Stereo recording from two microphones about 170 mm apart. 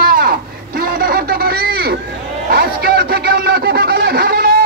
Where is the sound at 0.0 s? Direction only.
60° right (ahead or behind).